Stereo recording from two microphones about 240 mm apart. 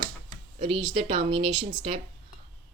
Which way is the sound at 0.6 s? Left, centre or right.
Right.